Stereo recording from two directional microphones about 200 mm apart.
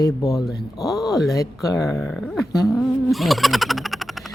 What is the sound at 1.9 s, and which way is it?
Speech, centre (ahead or behind).